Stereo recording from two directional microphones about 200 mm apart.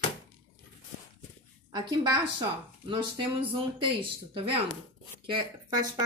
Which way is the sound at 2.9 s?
25° right (ahead or behind).